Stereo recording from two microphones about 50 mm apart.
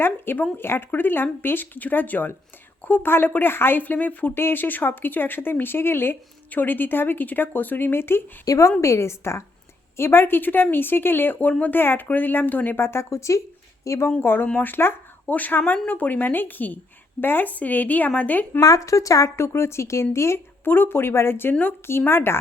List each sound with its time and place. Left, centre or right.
0.5 s speech: left
3.8 s speech: left
4.4 s speech: left
8.8 s speech: left
10.0 s speech: left
12.8 s speech: left
13.8 s speech: left
14.2 s speech: left
18.8 s speech: left
20.7 s speech: left